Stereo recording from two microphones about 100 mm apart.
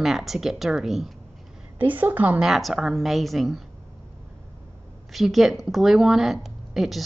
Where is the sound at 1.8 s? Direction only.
15° right (ahead or behind).